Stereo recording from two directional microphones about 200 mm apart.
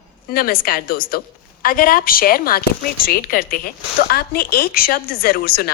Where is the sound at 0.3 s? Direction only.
45° left (ahead or behind).